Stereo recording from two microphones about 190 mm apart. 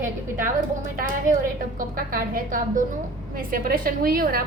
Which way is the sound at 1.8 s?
50° right (ahead or behind).